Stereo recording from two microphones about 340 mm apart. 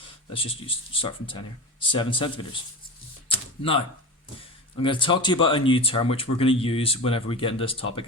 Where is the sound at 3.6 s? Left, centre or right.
Centre.